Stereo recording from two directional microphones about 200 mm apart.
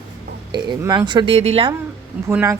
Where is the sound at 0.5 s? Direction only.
20° right (ahead or behind).